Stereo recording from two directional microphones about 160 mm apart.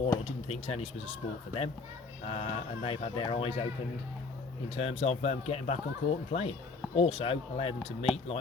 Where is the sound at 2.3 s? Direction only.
35° left (ahead or behind).